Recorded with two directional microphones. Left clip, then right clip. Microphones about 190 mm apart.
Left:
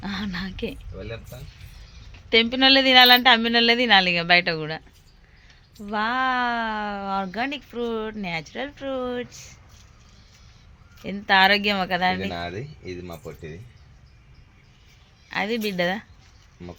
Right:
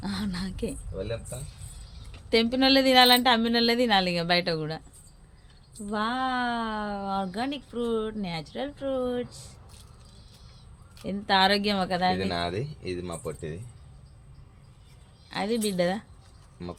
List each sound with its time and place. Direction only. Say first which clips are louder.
0.0 s speech: left 4 dB; centre (ahead or behind)
2.3 s a woman's voice: left 5 dB; centre (ahead or behind)
5.8 s speech: left 5 dB; 10° left (ahead or behind)
11.0 s a woman's voice: left 5 dB; 5° left (ahead or behind)
12.4 s a woman's voice: right 2 dB; 5° right (ahead or behind)
15.3 s a woman's voice: left 3 dB; 5° left (ahead or behind)